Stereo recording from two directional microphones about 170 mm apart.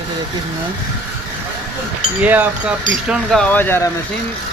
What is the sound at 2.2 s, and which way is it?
Speech, 10° right (ahead or behind).